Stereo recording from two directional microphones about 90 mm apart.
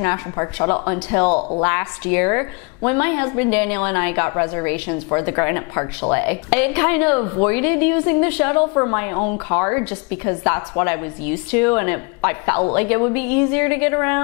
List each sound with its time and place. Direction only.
0.0 s a woman's voice: 20° left (ahead or behind)